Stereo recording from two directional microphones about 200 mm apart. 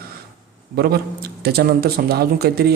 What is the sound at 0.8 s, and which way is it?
A man's voice, 50° right (ahead or behind).